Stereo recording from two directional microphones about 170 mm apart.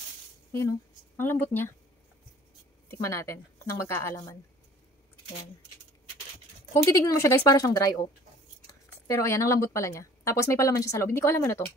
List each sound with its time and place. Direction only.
0.6 s speech: 15° left (ahead or behind)
2.9 s speech: 15° left (ahead or behind)
6.7 s a woman's voice: 15° left (ahead or behind)
9.0 s speech: 15° left (ahead or behind)